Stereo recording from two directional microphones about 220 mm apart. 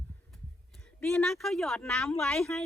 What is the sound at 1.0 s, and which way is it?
Speech, 5° left (ahead or behind).